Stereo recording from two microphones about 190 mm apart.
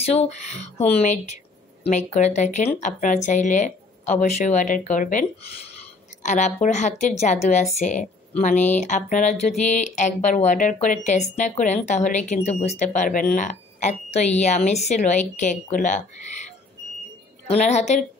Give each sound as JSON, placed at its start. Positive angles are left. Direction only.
{"t": 0.0, "sound": "speech", "side_deg": 35}
{"t": 6.2, "sound": "speech", "side_deg": 40}
{"t": 17.5, "sound": "speech", "side_deg": 35}